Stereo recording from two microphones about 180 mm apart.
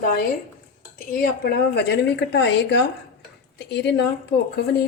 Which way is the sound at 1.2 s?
60° left (ahead or behind).